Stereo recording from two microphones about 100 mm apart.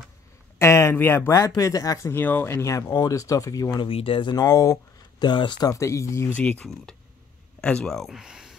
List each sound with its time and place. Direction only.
0.6 s speech: 30° left (ahead or behind)
2.1 s speech: 20° left (ahead or behind)
2.6 s speech: 35° left (ahead or behind)
3.7 s speech: 60° left (ahead or behind)
4.4 s speech: 35° left (ahead or behind)
5.2 s speech: 50° left (ahead or behind)
5.7 s speech: 30° left (ahead or behind)
6.3 s speech: 10° left (ahead or behind); by 8.5 s 5° right (ahead or behind)